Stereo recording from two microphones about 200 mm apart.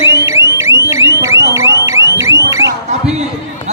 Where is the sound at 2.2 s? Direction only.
15° right (ahead or behind).